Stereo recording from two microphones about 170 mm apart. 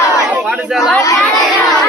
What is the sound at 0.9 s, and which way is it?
Chatter, 20° left (ahead or behind).